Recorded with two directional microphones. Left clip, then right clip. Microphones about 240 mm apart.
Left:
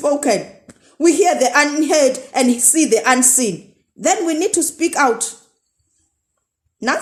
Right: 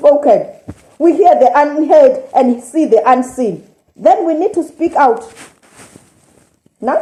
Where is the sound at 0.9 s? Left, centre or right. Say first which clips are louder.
Right 6 dB; left.